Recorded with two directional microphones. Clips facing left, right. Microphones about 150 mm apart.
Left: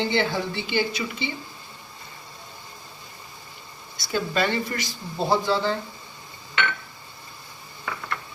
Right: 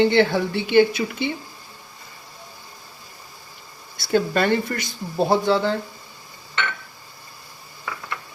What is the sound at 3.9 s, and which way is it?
A woman's voice, 55° right (ahead or behind).